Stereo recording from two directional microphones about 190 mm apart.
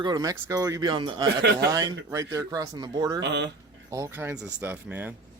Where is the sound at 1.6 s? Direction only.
20° right (ahead or behind).